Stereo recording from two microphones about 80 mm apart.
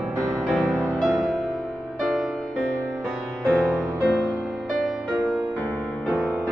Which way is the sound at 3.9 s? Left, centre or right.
Centre.